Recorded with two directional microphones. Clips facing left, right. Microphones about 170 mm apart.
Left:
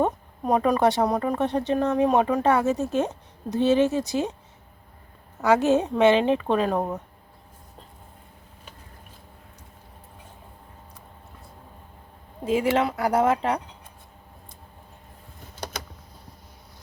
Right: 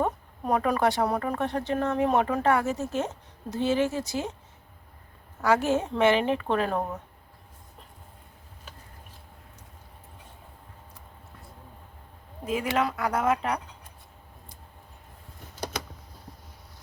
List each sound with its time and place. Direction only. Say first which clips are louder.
0.0 s speech: left 4 dB; 20° left (ahead or behind)
5.4 s speech: left 4 dB; 20° left (ahead or behind)
12.7 s speech: left 4 dB; 30° left (ahead or behind)